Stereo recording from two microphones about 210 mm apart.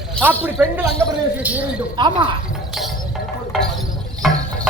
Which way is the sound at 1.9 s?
20° right (ahead or behind).